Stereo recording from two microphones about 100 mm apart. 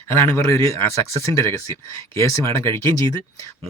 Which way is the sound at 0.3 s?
30° left (ahead or behind).